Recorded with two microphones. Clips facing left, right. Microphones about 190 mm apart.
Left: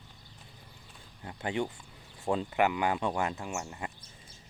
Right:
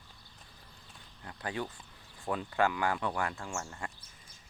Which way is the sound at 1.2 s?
25° left (ahead or behind).